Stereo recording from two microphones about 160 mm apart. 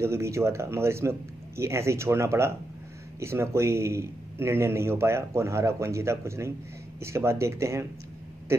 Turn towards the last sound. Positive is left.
turn(degrees=-15)  # may be behind; listen again after turning